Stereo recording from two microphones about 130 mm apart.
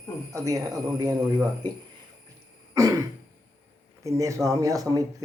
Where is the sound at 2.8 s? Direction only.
25° right (ahead or behind).